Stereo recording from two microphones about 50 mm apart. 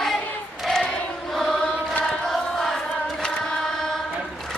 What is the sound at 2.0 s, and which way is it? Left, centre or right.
Carnatic music, centre.